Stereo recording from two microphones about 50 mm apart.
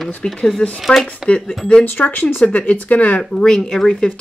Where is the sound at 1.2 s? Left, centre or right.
Centre.